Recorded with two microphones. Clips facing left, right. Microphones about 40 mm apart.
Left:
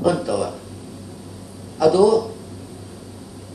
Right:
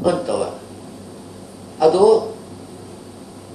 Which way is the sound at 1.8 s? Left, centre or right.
Right.